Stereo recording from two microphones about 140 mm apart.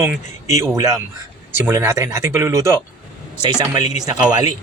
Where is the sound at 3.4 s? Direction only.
30° right (ahead or behind).